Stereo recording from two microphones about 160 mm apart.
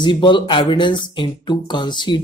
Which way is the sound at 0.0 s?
30° left (ahead or behind).